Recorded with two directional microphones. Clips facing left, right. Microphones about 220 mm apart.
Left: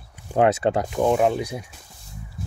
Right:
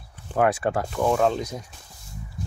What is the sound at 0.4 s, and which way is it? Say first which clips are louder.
Speech: left 3 dB; 25° left (ahead or behind).